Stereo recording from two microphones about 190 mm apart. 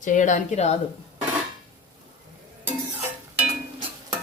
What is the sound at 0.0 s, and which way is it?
Speech, 40° left (ahead or behind).